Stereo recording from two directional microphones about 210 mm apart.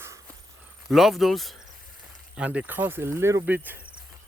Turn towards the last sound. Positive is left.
turn(degrees=-10)  # may be behind; listen again after turning